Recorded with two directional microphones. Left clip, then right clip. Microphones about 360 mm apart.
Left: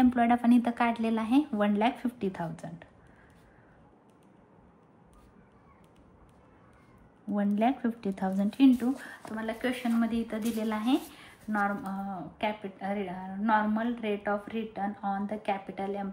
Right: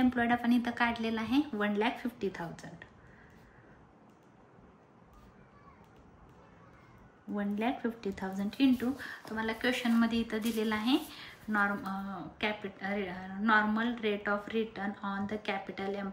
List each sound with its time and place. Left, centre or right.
0.0 s speech: centre
7.3 s speech: centre
9.4 s speech: centre